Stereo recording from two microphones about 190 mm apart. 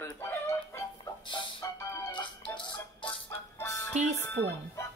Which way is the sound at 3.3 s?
10° left (ahead or behind).